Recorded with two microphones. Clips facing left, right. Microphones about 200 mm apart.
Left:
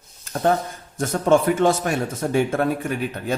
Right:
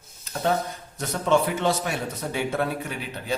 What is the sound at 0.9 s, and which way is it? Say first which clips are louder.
A man's voice: left 5 dB; 50° left (ahead or behind).